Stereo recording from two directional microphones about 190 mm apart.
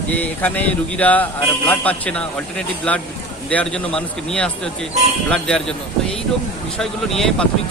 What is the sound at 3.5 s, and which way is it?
Speech, 5° left (ahead or behind).